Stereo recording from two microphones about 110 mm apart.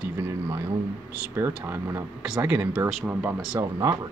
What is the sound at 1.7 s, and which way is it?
Speech, 25° right (ahead or behind).